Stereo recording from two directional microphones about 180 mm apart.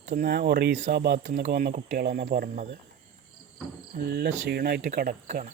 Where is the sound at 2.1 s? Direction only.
35° right (ahead or behind).